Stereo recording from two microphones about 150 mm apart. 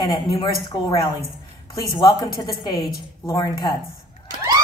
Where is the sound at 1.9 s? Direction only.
30° left (ahead or behind).